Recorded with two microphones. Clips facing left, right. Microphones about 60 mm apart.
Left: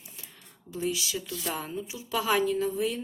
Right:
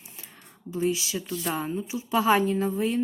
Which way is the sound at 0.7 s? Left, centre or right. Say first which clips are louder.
Right 4 dB; right.